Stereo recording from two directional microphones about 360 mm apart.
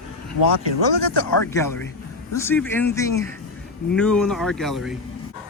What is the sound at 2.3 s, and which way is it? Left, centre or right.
Speech, centre.